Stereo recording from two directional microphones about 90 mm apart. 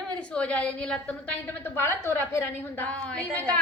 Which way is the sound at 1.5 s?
25° left (ahead or behind).